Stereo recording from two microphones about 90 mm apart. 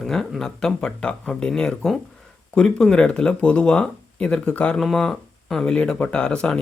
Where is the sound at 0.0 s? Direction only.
5° left (ahead or behind).